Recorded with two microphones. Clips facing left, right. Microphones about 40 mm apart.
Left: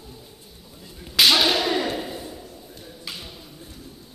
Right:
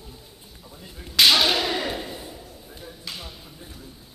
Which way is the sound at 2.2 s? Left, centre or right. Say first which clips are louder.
Left 2 dB; centre.